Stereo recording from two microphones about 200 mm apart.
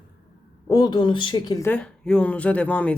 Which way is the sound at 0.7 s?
20° left (ahead or behind).